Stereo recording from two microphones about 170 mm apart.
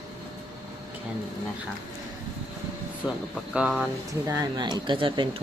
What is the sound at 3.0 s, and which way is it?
Speech, 10° right (ahead or behind).